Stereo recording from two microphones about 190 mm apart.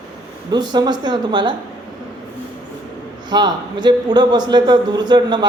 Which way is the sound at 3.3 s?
20° right (ahead or behind).